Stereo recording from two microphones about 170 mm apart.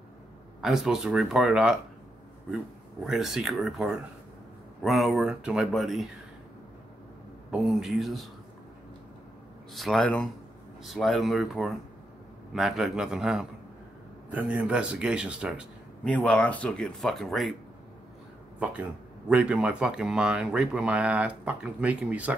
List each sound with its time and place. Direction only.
0.6 s speech: centre (ahead or behind)
3.0 s speech: centre (ahead or behind)
7.5 s speech: centre (ahead or behind)
9.8 s speech: centre (ahead or behind)
16.0 s speech: 5° left (ahead or behind)
18.6 s speech: 10° right (ahead or behind)